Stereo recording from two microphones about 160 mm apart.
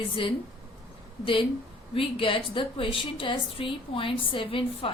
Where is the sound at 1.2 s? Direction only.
35° left (ahead or behind).